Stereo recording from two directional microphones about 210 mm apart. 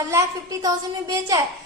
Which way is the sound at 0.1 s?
15° right (ahead or behind).